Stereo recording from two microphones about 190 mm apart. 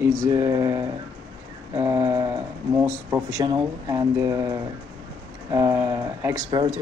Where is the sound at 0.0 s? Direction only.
15° right (ahead or behind).